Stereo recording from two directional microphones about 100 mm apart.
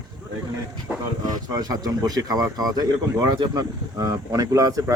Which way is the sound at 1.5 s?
40° right (ahead or behind).